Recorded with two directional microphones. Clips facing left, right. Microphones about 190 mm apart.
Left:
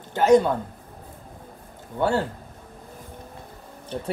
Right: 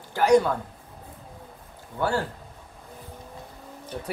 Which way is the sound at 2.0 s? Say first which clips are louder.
Left 3 dB; 25° left (ahead or behind).